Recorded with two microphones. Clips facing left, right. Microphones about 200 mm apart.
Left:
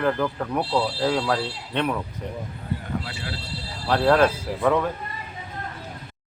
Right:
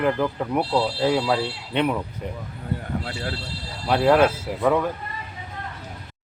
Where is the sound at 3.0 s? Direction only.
45° right (ahead or behind).